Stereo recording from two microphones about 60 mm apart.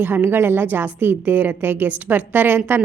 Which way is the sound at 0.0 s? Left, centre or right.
Right.